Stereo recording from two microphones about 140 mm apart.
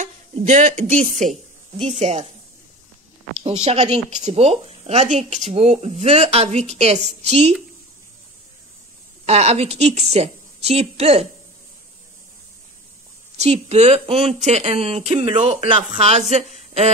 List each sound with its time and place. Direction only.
0.0 s speech: 60° right (ahead or behind)
3.4 s speech: 50° right (ahead or behind)
9.2 s speech: 50° right (ahead or behind)
13.4 s speech: 50° right (ahead or behind)